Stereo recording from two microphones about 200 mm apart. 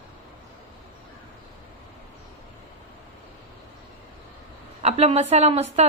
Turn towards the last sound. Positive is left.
turn(degrees=-35)  # may be behind; listen again after turning